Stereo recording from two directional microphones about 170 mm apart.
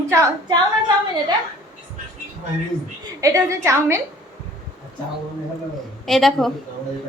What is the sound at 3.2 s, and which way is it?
Speech, 20° right (ahead or behind).